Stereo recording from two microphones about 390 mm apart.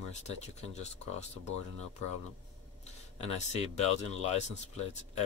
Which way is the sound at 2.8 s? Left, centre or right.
Centre.